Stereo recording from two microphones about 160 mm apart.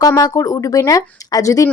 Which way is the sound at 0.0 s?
20° left (ahead or behind).